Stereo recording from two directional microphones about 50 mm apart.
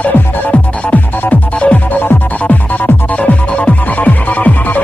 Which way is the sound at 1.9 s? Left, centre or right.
Left.